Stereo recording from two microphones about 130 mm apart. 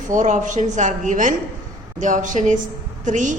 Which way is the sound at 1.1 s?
85° right.